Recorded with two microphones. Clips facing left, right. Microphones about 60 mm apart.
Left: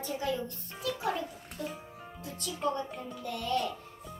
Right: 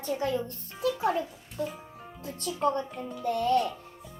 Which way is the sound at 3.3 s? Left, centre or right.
Right.